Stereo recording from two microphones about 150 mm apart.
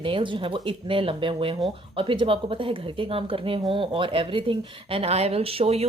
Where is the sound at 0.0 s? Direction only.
35° right (ahead or behind).